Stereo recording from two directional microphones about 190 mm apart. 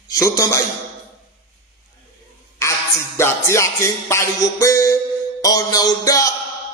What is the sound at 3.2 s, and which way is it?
Music, 15° left (ahead or behind).